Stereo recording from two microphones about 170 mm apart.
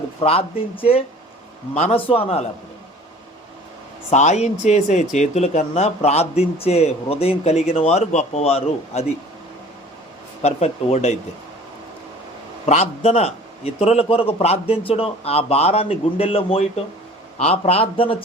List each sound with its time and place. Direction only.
0.2 s speech: 35° left (ahead or behind)
4.1 s speech: 45° left (ahead or behind)
10.4 s speech: 40° left (ahead or behind)
12.6 s speech: 40° left (ahead or behind)